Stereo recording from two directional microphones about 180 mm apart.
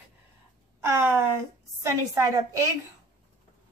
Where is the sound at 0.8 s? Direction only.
15° right (ahead or behind).